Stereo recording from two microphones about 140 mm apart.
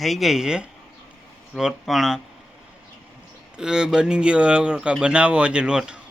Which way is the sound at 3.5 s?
5° right (ahead or behind).